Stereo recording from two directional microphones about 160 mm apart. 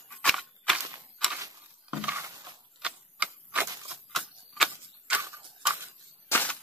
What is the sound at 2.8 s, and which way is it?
Typewriter, 5° right (ahead or behind).